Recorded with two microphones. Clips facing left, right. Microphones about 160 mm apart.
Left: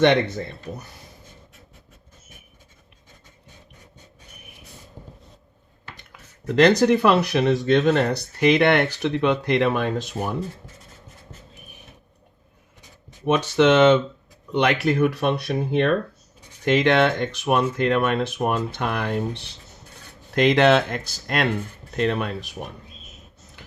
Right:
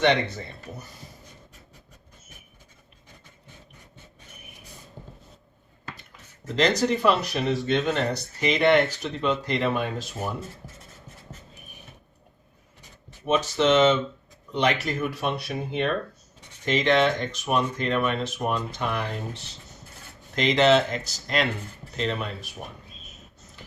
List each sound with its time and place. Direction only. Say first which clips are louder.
5.0 s vehicle: left 1 dB; 10° left (ahead or behind)
6.1 s speech: left 9 dB; 65° left (ahead or behind)
13.2 s speech: left 4 dB; 65° left (ahead or behind)